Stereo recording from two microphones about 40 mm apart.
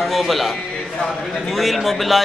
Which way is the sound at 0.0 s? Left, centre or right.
Centre.